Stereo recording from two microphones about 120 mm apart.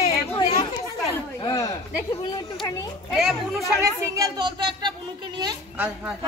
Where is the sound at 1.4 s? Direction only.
30° left (ahead or behind).